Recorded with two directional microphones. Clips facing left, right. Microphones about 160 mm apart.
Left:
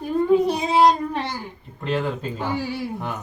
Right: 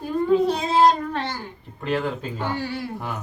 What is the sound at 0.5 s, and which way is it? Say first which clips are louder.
Speech: left 1 dB; 15° left (ahead or behind).